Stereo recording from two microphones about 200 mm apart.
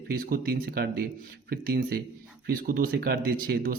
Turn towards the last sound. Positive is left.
turn(degrees=-50)  # may be behind; listen again after turning